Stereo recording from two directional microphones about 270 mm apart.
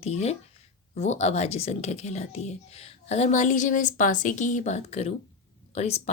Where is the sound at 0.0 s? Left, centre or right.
Left.